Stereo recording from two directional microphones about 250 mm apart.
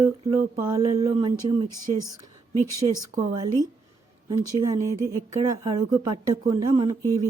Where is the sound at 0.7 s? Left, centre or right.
Centre.